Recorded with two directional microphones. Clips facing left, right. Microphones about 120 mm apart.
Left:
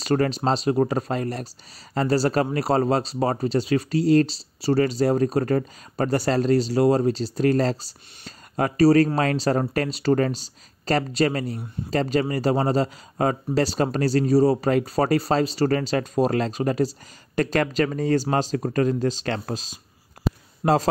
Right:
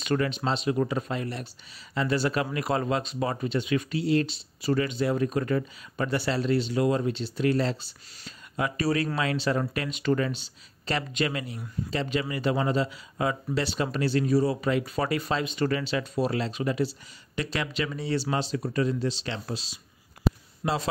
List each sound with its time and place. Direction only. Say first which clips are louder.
0.0 s speech: left 5 dB; 35° left (ahead or behind)